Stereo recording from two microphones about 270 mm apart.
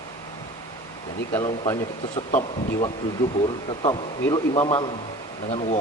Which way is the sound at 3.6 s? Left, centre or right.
Centre.